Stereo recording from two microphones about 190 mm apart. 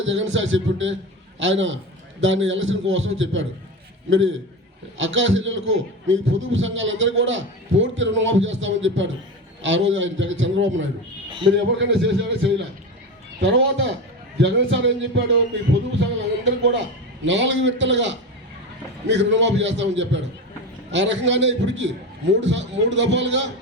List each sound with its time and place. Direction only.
0.0 s a man's voice: 80° right
11.4 s a man's voice: 75° right (ahead or behind)